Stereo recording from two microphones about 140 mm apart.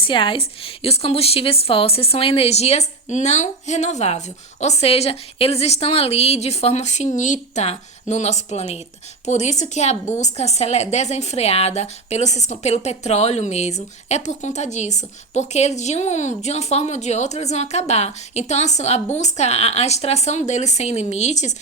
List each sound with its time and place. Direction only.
0.0 s a woman's voice: 35° left (ahead or behind); by 21.5 s 55° left (ahead or behind)